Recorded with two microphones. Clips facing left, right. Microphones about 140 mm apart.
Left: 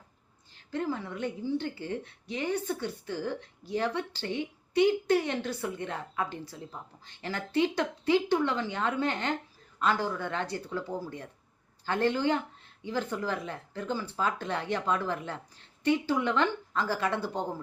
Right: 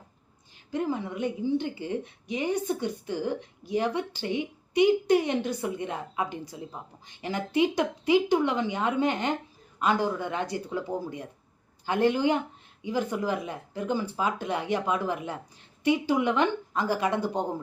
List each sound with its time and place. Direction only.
0.7 s a woman's voice: 15° right (ahead or behind)